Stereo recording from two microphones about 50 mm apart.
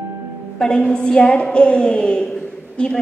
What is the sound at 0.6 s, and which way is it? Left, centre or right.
A woman's voice, centre.